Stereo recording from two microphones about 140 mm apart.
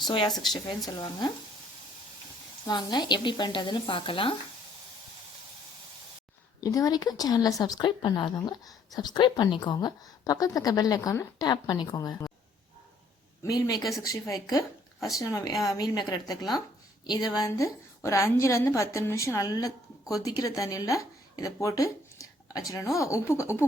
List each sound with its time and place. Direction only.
0.1 s a woman's voice: 30° left (ahead or behind)
2.6 s a woman's voice: 30° left (ahead or behind)
6.6 s a woman's voice: 25° left (ahead or behind)
13.5 s a woman's voice: 25° left (ahead or behind)